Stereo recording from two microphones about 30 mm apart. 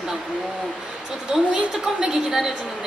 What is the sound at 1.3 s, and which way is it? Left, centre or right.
Speech, right.